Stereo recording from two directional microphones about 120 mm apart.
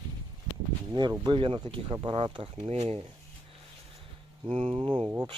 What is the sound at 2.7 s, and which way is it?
Speech, 60° right (ahead or behind).